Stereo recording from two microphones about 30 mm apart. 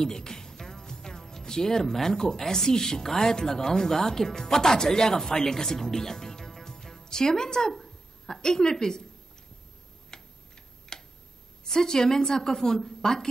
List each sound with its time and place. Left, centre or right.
0.0 s a woman's voice: left
10.1 s typing: left
11.6 s a woman's voice: centre